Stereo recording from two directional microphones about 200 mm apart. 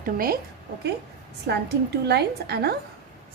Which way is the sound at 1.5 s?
55° right (ahead or behind).